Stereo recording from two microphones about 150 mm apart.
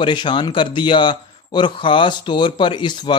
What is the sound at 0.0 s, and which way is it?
A man's voice, 30° left (ahead or behind).